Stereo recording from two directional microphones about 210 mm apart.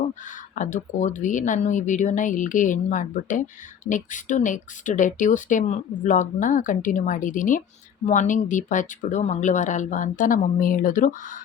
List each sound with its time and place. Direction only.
0.1 s speech: 35° left (ahead or behind)